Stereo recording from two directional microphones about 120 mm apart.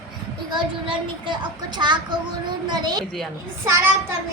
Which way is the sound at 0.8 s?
40° right (ahead or behind).